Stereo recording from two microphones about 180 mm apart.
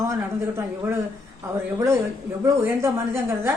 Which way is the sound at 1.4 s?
15° right (ahead or behind).